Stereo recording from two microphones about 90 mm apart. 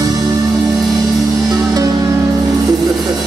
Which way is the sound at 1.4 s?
45° right (ahead or behind).